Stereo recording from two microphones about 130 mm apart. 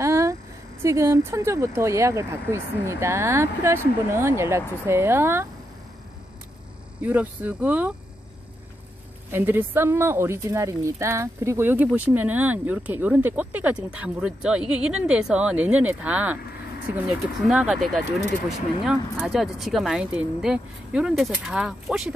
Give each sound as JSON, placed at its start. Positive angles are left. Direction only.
{"t": 0.0, "sound": "a sound", "side_deg": -20}
{"t": 0.8, "sound": "speech", "side_deg": -20}
{"t": 7.0, "sound": "a woman's voice", "side_deg": -10}
{"t": 9.3, "sound": "a woman's voice", "side_deg": -15}
{"t": 19.2, "sound": "a woman's voice", "side_deg": 0}